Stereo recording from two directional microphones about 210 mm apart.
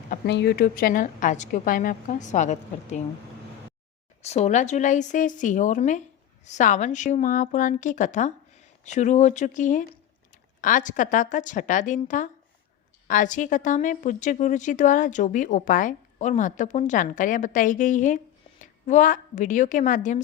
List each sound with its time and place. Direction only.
0.1 s a woman's voice: 55° left (ahead or behind); by 3.0 s 35° left (ahead or behind)
4.3 s a woman's voice: 35° left (ahead or behind)